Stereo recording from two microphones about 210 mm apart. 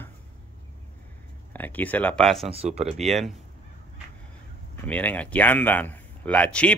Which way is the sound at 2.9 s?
Centre (ahead or behind).